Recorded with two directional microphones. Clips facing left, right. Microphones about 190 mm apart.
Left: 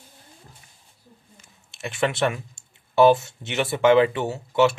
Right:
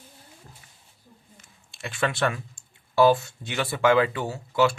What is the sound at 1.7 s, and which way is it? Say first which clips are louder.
Speech: left 3 dB; 20° left (ahead or behind).